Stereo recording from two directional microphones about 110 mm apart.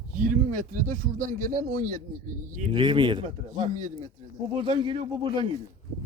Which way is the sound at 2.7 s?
45° right (ahead or behind).